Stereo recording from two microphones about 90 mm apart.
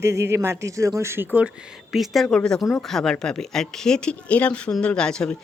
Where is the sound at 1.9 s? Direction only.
Centre (ahead or behind).